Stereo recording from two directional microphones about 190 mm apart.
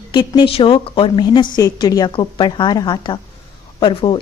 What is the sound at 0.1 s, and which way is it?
A woman's voice, 25° left (ahead or behind).